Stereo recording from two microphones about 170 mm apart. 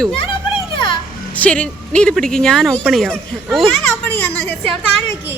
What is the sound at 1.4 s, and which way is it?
Speech, 10° left (ahead or behind).